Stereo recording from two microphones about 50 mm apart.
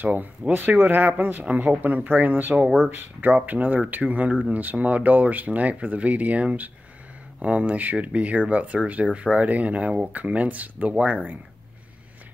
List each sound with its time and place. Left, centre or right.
0.0 s speech: right